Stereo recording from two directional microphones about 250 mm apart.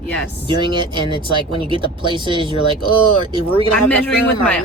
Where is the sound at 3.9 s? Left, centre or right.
Centre.